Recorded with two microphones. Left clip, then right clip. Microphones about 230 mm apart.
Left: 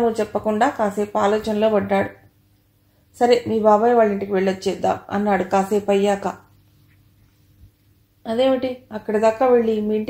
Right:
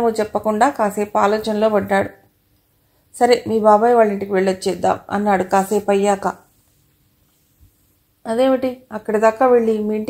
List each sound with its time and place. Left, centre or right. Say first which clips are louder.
0.0 s speech: right 2 dB; right
3.2 s speech: right 2 dB; right
8.2 s speech: right 2 dB; right